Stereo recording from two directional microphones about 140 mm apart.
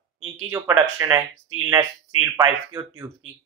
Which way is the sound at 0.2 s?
25° right (ahead or behind).